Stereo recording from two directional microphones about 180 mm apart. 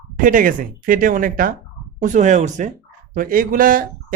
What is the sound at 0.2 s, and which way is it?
Speech, 50° right (ahead or behind).